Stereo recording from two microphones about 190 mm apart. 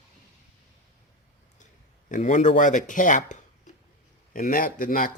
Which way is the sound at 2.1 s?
40° left (ahead or behind).